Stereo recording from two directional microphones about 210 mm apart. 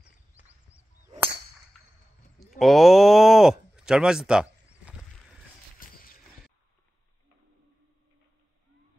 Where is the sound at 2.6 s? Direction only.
Centre (ahead or behind).